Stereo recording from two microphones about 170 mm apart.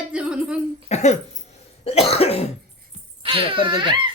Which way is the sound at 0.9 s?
40° left (ahead or behind).